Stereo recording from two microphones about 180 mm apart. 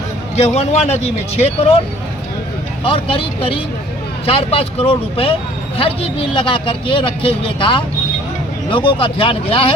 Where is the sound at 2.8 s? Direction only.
30° left (ahead or behind).